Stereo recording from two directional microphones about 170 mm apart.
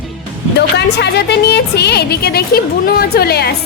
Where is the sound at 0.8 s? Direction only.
85° left.